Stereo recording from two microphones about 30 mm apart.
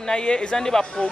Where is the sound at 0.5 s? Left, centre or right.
Left.